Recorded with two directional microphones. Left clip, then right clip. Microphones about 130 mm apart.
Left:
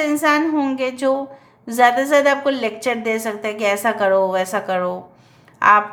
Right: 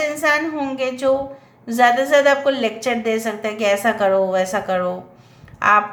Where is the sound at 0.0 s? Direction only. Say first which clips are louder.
Left 1 dB; 35° left (ahead or behind).